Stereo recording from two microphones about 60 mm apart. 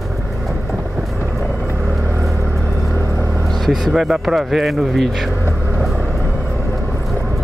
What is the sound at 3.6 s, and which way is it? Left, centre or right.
Speech, centre.